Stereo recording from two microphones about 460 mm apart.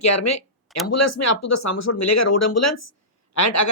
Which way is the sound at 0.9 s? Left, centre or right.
Left.